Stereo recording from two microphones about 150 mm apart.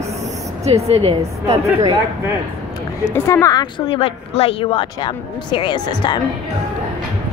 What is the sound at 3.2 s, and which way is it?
Speech, 20° left (ahead or behind).